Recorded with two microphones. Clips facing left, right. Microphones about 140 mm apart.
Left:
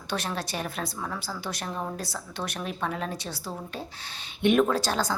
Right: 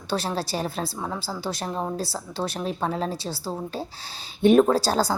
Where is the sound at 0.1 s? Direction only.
30° right (ahead or behind).